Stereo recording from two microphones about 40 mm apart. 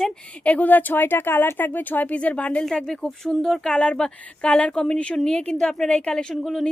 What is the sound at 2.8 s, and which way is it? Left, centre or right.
Speech, centre.